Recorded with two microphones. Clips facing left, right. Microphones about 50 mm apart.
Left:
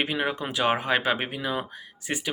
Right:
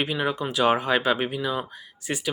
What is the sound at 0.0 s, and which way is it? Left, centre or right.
Speech, left.